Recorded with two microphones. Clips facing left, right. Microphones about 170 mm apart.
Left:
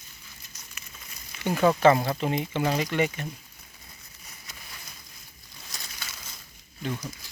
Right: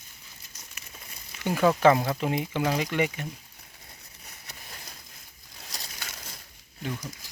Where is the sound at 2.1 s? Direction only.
10° right (ahead or behind).